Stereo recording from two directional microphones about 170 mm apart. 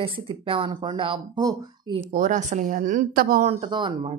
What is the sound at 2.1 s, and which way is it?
A woman's voice, 50° right (ahead or behind).